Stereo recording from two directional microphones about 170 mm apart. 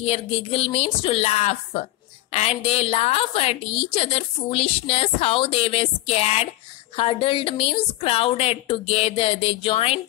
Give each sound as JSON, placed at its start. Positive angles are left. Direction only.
{"t": 0.0, "sound": "a woman's voice", "side_deg": 35}